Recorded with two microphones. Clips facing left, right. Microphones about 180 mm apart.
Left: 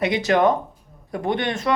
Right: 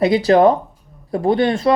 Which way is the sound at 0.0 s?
35° right (ahead or behind).